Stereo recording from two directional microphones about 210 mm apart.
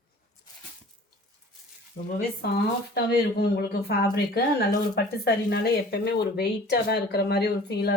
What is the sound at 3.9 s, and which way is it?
Speech, 50° left (ahead or behind).